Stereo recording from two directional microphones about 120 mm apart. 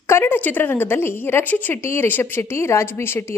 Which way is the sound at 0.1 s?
20° left (ahead or behind).